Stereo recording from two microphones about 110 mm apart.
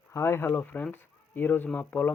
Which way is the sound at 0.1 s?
25° left (ahead or behind).